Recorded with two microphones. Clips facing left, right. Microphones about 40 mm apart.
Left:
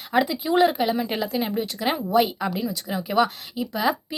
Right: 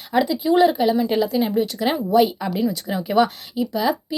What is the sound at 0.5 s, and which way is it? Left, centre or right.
Speech, centre.